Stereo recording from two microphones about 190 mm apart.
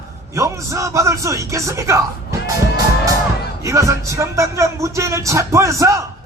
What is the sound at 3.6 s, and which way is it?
A man's voice, 15° right (ahead or behind).